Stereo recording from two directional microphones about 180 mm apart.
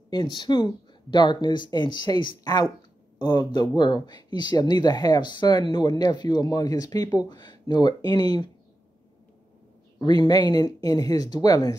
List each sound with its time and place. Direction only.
0.1 s speech: 25° left (ahead or behind)
9.9 s speech: 25° left (ahead or behind)